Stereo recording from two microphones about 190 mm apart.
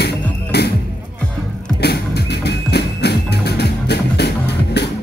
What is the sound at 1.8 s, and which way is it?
Music, 60° left (ahead or behind).